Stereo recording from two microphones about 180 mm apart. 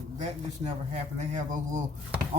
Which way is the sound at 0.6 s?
40° right (ahead or behind).